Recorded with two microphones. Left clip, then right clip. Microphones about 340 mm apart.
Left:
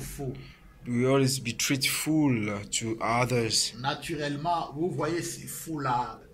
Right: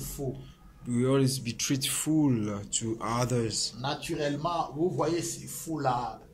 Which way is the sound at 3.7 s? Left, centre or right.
Right.